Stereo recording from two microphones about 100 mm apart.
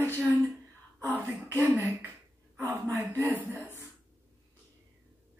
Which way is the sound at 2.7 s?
20° right (ahead or behind).